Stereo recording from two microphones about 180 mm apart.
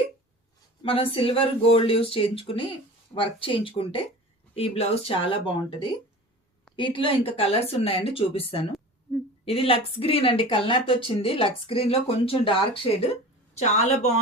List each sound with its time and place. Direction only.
0.8 s speech: 30° left (ahead or behind)